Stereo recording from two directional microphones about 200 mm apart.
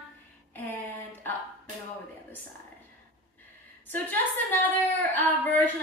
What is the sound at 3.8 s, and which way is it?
A woman's voice, 10° left (ahead or behind).